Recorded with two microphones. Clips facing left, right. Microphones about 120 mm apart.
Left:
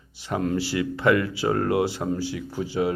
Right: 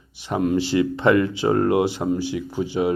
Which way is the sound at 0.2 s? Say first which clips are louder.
Right 4 dB; 20° right (ahead or behind).